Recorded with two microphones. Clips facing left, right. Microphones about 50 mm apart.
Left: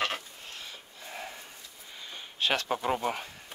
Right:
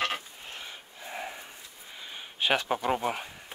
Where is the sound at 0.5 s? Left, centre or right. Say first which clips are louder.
Right 3 dB; right.